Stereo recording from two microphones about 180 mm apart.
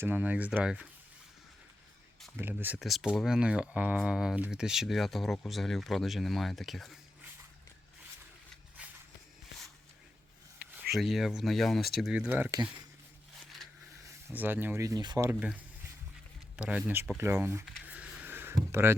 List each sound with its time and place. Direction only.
0.0 s speech: 10° right (ahead or behind)
2.3 s speech: 10° right (ahead or behind)
2.7 s speech: centre (ahead or behind)
8.8 s walk: 5° right (ahead or behind)
10.9 s speech: centre (ahead or behind)
14.3 s speech: 10° right (ahead or behind)
15.3 s speech: 5° right (ahead or behind)
17.8 s a sound: 10° right (ahead or behind)